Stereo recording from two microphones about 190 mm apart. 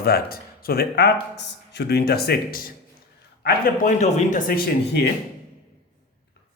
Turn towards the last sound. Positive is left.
turn(degrees=60)  # may be behind; listen again after turning